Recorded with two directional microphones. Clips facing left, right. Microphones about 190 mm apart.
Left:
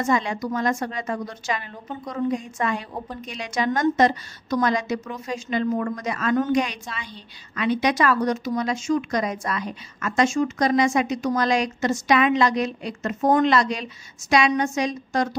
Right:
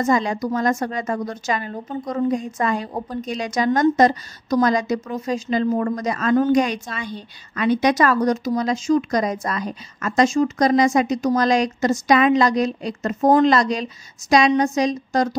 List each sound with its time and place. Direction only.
0.0 s a woman's voice: 40° right (ahead or behind)